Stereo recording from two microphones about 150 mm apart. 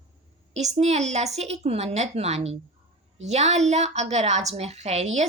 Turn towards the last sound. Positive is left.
turn(degrees=-50)  # may be behind; listen again after turning